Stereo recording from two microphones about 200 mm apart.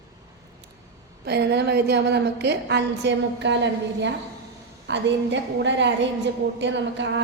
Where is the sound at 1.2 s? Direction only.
55° right (ahead or behind).